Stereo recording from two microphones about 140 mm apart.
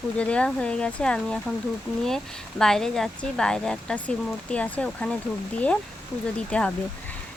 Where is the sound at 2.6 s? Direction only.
5° left (ahead or behind).